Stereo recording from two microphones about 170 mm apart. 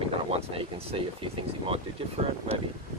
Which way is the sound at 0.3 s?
35° right (ahead or behind).